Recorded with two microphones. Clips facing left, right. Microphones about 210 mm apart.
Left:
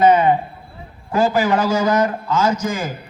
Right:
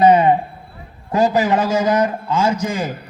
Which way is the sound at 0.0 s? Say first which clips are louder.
Right 1 dB; 35° right (ahead or behind).